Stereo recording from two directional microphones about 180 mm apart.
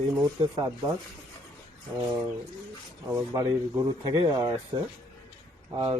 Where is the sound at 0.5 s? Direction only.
20° right (ahead or behind).